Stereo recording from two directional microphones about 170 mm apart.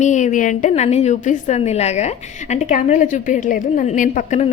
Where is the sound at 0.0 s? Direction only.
45° left (ahead or behind).